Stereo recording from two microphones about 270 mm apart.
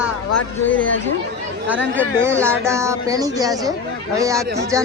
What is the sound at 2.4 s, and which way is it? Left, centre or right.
A woman's voice, centre.